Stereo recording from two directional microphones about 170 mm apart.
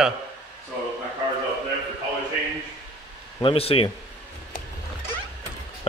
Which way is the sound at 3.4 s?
35° left (ahead or behind).